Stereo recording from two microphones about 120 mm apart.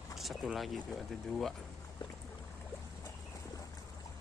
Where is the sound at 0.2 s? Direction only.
Centre (ahead or behind).